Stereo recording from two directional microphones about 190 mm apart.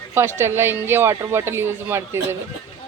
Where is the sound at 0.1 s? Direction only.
10° right (ahead or behind).